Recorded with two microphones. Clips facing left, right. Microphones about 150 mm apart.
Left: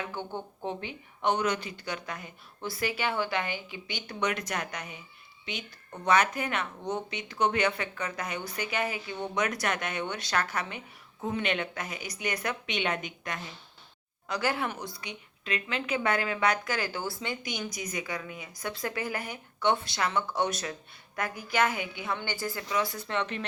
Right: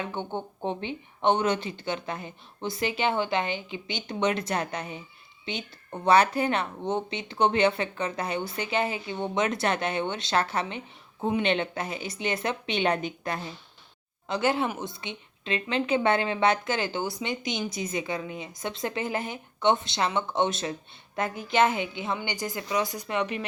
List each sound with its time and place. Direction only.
0.1 s speech: 25° right (ahead or behind)